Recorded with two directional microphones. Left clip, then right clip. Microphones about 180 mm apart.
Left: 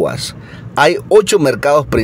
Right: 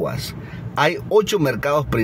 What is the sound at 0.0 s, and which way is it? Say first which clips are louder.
A man's voice: left 8 dB; 40° left (ahead or behind).